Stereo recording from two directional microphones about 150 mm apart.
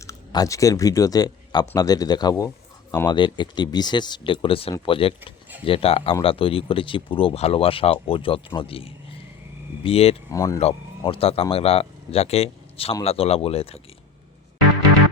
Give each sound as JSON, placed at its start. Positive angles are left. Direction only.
{"t": 0.0, "sound": "speech", "side_deg": 20}
{"t": 10.2, "sound": "speech", "side_deg": 20}
{"t": 11.0, "sound": "speech", "side_deg": 40}